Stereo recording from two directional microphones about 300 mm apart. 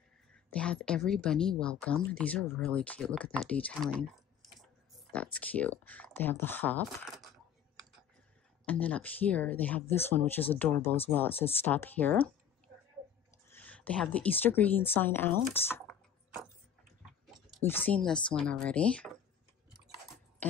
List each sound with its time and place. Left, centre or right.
0.5 s speech: centre
3.9 s a sound: centre
5.1 s speech: centre
8.6 s speech: centre
11.3 s speech: centre
11.6 s speech: centre
13.5 s speech: centre
17.6 s speech: centre